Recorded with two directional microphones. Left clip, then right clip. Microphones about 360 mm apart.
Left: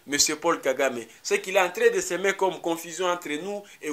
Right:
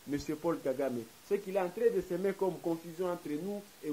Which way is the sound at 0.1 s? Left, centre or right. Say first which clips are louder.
Left 11 dB; centre.